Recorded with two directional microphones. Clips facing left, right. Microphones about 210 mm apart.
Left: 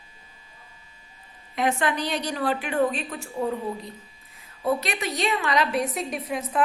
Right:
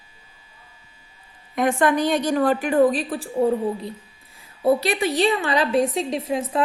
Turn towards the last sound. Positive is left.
turn(degrees=-25)  # may be behind; listen again after turning